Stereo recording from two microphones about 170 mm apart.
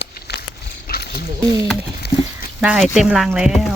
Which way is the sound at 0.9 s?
65° left (ahead or behind).